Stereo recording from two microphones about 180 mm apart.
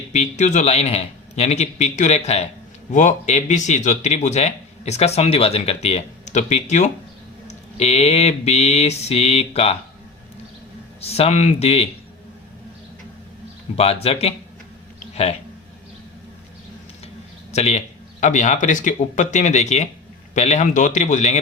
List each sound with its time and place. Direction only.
0.1 s speech: 40° left (ahead or behind)
11.0 s speech: 35° left (ahead or behind)
13.7 s speech: 35° left (ahead or behind)
17.5 s speech: 40° left (ahead or behind)